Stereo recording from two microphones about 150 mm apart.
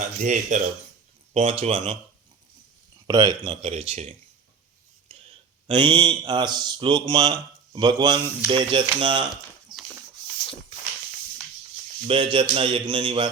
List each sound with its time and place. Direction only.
0.0 s speech: 55° right (ahead or behind)
1.3 s speech: 40° right (ahead or behind)
3.1 s speech: 30° right (ahead or behind); by 4.1 s 45° right (ahead or behind)
5.1 s a sound: 40° right (ahead or behind)
5.7 s speech: 30° right (ahead or behind)
12.0 s speech: 35° right (ahead or behind)